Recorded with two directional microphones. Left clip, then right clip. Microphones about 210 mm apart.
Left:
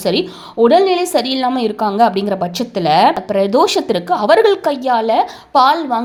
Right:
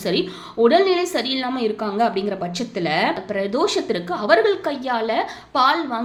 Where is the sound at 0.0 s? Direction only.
30° left (ahead or behind).